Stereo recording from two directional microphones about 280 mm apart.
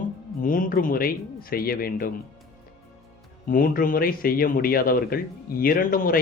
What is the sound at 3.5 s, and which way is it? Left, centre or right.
Speech, left.